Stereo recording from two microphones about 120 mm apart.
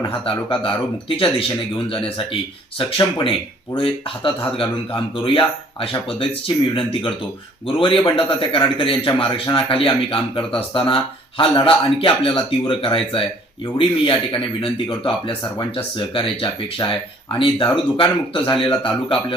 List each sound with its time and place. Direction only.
0.1 s a man's voice: 45° left (ahead or behind)
7.8 s a man's voice: 45° left (ahead or behind)